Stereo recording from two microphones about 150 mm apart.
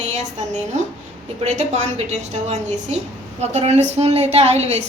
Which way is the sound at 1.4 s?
50° right (ahead or behind).